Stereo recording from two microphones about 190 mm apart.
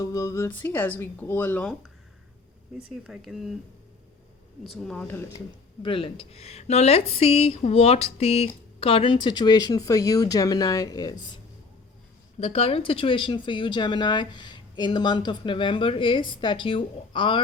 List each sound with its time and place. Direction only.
0.0 s speech: 15° left (ahead or behind)
2.9 s speech: centre (ahead or behind)
4.6 s speech: centre (ahead or behind)
5.8 s speech: 25° left (ahead or behind)
12.4 s speech: 35° left (ahead or behind)